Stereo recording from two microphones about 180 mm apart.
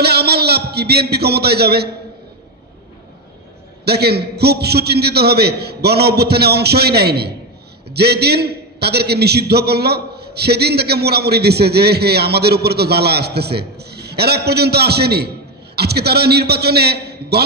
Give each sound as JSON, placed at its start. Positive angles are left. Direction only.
{"t": 0.0, "sound": "a man's voice", "side_deg": -65}
{"t": 3.8, "sound": "a man's voice", "side_deg": -60}